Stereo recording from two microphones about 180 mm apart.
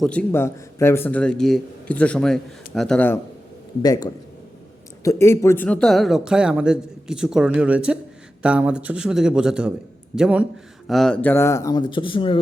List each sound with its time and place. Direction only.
0.0 s a man's voice: 5° left (ahead or behind)
3.8 s a man's voice: 20° left (ahead or behind)